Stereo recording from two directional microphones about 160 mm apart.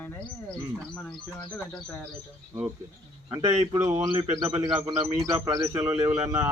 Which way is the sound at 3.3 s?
20° right (ahead or behind).